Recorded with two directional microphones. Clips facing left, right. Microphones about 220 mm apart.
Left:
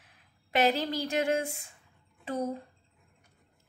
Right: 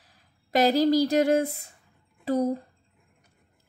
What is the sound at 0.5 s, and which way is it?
Speech, 35° right (ahead or behind).